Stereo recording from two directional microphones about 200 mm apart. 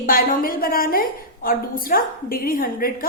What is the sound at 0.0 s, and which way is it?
A woman's voice, 45° left (ahead or behind).